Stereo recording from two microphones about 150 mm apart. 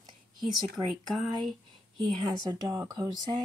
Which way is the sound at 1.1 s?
Centre (ahead or behind).